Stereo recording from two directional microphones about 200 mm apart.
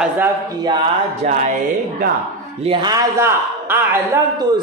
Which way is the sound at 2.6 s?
25° right (ahead or behind).